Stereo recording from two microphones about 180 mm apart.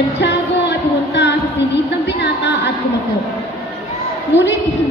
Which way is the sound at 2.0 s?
75° left (ahead or behind).